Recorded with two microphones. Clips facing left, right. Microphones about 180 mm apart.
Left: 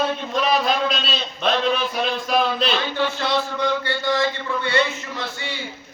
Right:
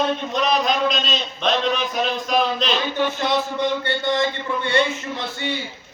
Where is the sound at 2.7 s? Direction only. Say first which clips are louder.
Right 1 dB; 15° right (ahead or behind).